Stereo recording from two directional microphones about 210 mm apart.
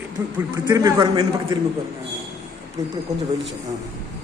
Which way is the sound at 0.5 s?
15° right (ahead or behind).